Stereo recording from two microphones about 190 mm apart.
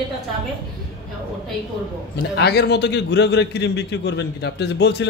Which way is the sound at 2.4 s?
60° left (ahead or behind).